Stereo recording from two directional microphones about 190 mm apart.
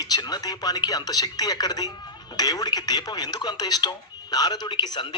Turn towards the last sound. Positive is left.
turn(degrees=25)  # may be behind; listen again after turning